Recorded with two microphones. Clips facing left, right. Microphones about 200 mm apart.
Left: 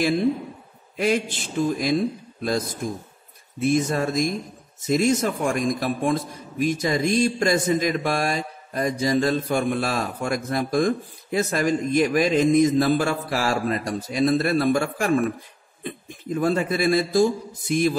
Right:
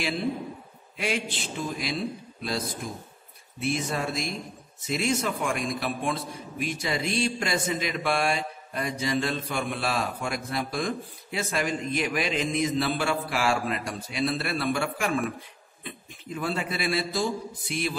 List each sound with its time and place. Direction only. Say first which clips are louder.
0.9 s a man's voice: left 7 dB; 45° left (ahead or behind)